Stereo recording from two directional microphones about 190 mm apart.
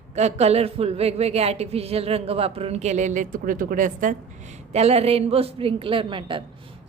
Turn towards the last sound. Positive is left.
turn(degrees=-25)  # may be behind; listen again after turning